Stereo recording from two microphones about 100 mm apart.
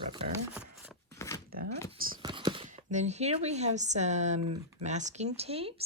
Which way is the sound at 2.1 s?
50° right (ahead or behind).